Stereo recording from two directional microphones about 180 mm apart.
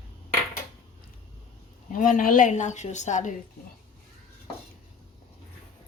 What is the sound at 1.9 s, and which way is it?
A woman's voice, 45° left (ahead or behind).